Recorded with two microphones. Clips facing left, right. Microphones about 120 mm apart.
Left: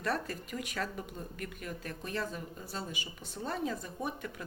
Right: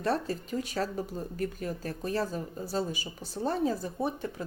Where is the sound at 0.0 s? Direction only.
30° right (ahead or behind).